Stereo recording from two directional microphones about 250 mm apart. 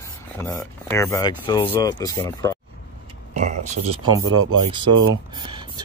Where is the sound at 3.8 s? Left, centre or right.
Right.